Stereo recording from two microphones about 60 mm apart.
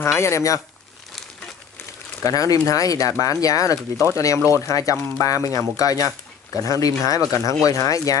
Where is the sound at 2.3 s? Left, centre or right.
Left.